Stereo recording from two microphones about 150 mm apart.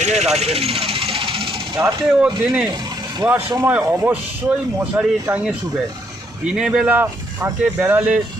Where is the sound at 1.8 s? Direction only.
30° right (ahead or behind).